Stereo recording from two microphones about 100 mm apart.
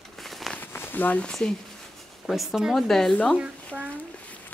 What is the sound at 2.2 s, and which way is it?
Speech, centre (ahead or behind).